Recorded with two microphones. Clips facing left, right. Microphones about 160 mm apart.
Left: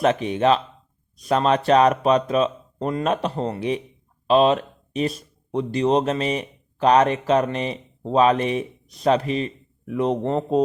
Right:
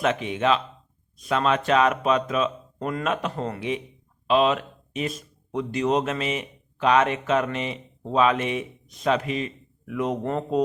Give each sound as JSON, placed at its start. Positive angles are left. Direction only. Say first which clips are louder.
{"t": 0.0, "sound": "speech", "louder": "left 4 dB", "side_deg": 35}